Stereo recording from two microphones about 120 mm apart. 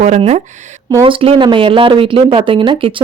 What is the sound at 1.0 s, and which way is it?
A woman's voice, 50° right (ahead or behind).